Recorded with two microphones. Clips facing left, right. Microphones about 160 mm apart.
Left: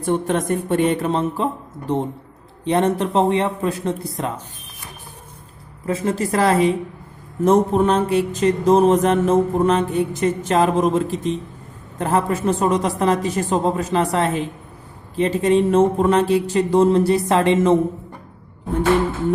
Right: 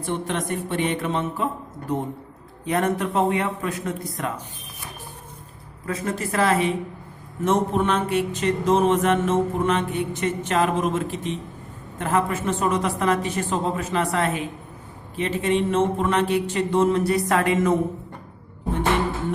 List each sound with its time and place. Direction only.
0.0 s speech: 45° left (ahead or behind)
2.6 s speech: 30° left (ahead or behind)
5.8 s a sound: 30° left (ahead or behind)